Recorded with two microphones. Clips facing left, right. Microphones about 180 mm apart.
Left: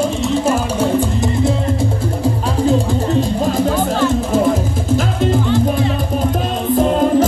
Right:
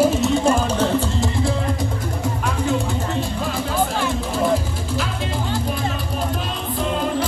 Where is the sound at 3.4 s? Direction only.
40° left (ahead or behind).